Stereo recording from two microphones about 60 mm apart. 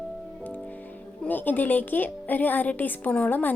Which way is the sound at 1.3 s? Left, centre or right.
Left.